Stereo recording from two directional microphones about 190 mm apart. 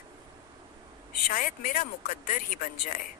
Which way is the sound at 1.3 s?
45° left (ahead or behind).